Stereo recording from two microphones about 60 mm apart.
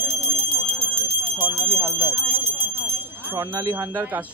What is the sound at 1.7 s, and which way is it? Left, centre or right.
Alarm, right.